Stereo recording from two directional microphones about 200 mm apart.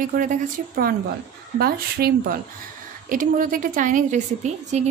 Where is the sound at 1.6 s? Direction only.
50° right (ahead or behind).